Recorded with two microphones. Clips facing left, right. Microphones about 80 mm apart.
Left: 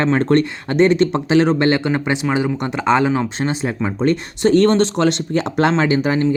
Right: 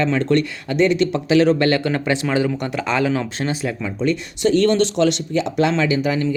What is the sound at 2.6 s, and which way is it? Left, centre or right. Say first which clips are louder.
Speech: left 4 dB; left.